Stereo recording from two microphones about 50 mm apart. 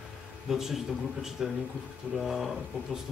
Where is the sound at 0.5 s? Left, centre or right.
Centre.